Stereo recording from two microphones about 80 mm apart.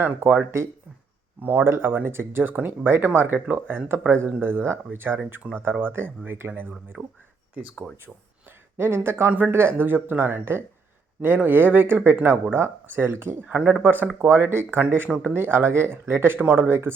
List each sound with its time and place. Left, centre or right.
0.0 s speech: centre
5.4 s speech: centre
5.8 s speech: right
13.5 s speech: centre
13.8 s speech: right